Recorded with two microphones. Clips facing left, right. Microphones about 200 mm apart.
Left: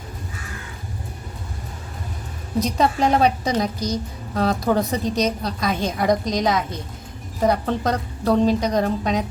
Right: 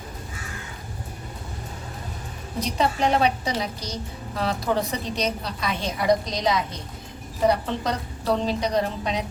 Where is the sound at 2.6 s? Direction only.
45° left (ahead or behind).